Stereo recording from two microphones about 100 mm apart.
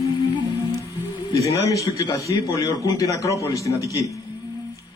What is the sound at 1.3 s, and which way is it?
A man's voice, 30° left (ahead or behind).